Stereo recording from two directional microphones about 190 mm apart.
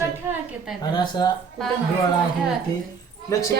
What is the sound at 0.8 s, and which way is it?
Speech, 20° left (ahead or behind).